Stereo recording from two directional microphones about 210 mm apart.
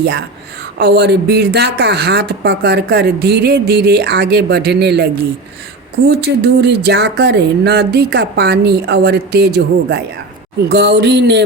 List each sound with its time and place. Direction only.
0.8 s speech: 50° right (ahead or behind)
6.1 s speech: 50° right (ahead or behind)